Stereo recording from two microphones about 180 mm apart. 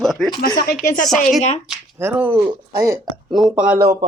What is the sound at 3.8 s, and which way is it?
Speech, 20° right (ahead or behind).